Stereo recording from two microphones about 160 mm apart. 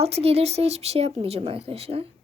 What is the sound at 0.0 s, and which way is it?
Speech, 40° right (ahead or behind).